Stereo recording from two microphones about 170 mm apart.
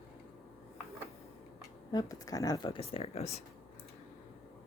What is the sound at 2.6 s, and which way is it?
Speech, 35° left (ahead or behind).